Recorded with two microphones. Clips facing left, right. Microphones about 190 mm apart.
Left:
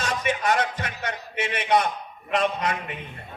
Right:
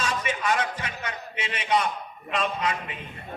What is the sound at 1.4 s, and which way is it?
A man's voice, 60° left (ahead or behind).